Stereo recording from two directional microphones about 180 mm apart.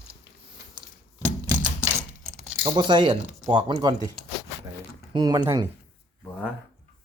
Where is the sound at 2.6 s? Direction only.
25° right (ahead or behind).